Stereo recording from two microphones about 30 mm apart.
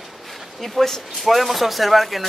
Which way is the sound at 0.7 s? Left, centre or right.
Centre.